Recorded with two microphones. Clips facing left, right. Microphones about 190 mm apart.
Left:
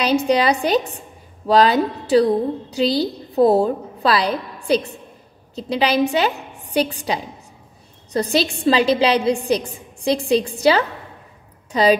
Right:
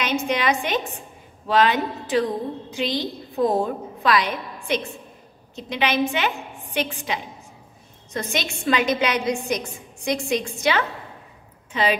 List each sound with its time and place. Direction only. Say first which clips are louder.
0.3 s a woman's voice: left 6 dB; 35° left (ahead or behind)